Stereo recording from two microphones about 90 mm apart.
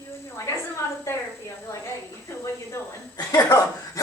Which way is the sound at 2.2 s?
35° left (ahead or behind).